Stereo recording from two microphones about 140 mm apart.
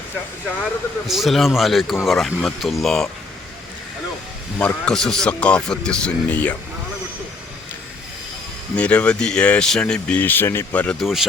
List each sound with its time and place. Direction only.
0.6 s speech: centre (ahead or behind)
4.5 s speech: 15° left (ahead or behind)
4.9 s speech: 5° left (ahead or behind)
8.7 s speech: 10° left (ahead or behind)
11.0 s speech: centre (ahead or behind)